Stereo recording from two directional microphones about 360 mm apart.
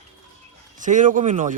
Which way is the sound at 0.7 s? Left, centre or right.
Right.